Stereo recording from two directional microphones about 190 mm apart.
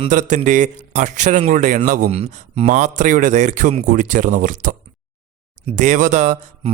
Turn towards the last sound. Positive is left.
turn(degrees=-40)  # may be behind; listen again after turning